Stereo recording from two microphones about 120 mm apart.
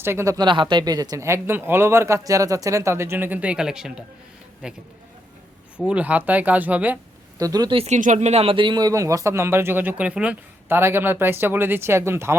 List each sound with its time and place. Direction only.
0.0 s a man's voice: 20° right (ahead or behind)
0.3 s a man's voice: 40° right (ahead or behind); by 7.0 s 10° right (ahead or behind)
7.3 s a man's voice: 30° right (ahead or behind)
7.9 s a man's voice: 85° right; by 12.4 s 20° right (ahead or behind)